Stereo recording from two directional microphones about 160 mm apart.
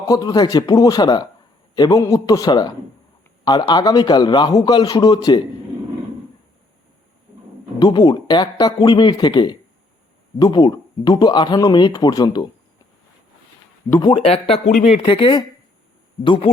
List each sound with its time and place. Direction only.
0.1 s speech: 25° left (ahead or behind)
7.8 s speech: 25° left (ahead or behind)
14.1 s speech: 35° left (ahead or behind)